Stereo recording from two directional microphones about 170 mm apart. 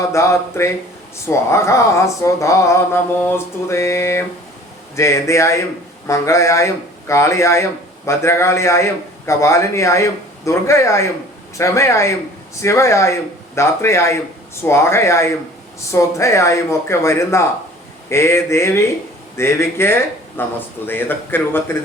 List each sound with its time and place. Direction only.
0.1 s speech: 15° left (ahead or behind)